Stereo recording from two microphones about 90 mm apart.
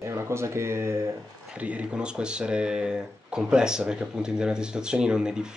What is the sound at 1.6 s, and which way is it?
Speech, 10° right (ahead or behind).